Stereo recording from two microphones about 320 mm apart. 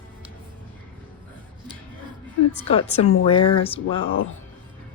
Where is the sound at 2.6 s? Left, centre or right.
Centre.